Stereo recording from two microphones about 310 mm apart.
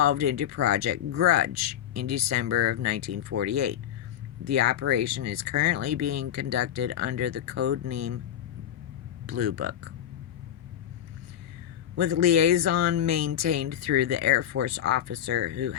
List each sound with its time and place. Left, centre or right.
0.0 s speech: right
9.2 s speech: right
11.9 s speech: right